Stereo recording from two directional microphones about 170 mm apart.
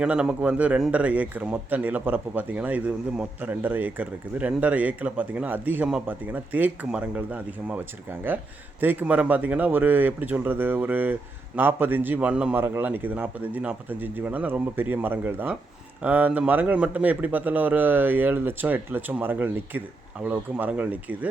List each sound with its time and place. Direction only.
0.0 s a man's voice: 5° right (ahead or behind)